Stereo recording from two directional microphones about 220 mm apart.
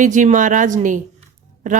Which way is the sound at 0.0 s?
35° right (ahead or behind).